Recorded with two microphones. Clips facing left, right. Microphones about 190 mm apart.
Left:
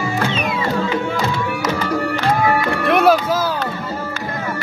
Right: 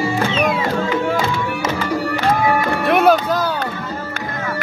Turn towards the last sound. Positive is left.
turn(degrees=0)  # may be behind; listen again after turning